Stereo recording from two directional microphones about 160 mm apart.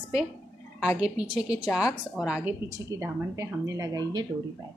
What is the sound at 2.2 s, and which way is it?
Speech, 5° right (ahead or behind).